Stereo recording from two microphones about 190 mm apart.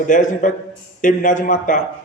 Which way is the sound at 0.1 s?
40° left (ahead or behind).